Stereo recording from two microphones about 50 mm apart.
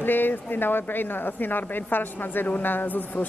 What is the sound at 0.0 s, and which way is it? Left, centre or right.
Speech, left.